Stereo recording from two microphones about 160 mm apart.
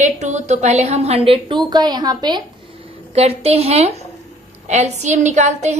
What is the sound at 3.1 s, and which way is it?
A woman's voice, 40° right (ahead or behind).